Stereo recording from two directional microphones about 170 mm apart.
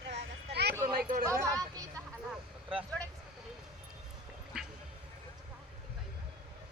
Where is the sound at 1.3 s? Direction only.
20° right (ahead or behind).